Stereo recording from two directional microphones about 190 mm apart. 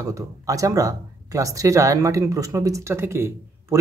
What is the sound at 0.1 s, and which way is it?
Speech, 15° right (ahead or behind).